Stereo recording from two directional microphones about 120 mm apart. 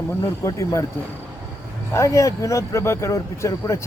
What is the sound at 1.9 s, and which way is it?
Speech, 25° left (ahead or behind).